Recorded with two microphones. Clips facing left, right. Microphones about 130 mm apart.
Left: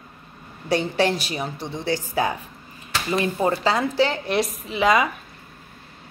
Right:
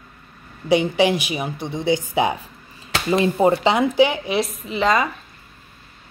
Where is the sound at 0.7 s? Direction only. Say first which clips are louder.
Right 4 dB; 15° right (ahead or behind).